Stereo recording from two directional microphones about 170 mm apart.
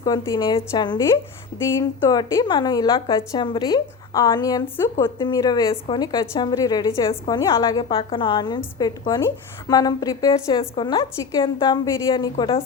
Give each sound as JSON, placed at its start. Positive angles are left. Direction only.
{"t": 0.0, "sound": "a woman's voice", "side_deg": 20}